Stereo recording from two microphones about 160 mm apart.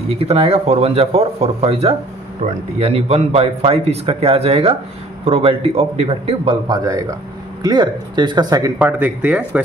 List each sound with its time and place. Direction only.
0.1 s speech: 40° right (ahead or behind)
8.7 s speech: 10° right (ahead or behind)